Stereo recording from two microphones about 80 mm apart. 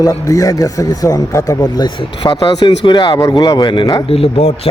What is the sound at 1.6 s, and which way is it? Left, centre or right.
Speech, left.